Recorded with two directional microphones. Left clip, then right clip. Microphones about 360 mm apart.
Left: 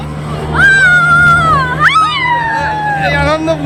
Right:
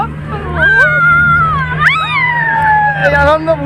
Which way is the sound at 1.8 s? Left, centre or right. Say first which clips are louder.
Left 1 dB; centre.